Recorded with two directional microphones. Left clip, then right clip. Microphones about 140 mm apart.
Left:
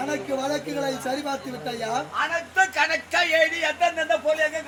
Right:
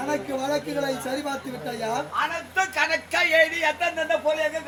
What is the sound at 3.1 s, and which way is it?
Speech, 5° right (ahead or behind).